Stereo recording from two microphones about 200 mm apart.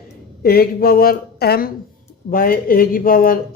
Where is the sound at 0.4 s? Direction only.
50° left (ahead or behind).